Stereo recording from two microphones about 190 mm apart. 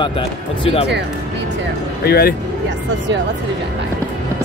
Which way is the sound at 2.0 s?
55° left (ahead or behind).